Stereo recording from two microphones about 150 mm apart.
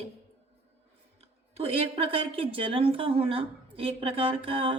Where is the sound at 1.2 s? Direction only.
40° right (ahead or behind).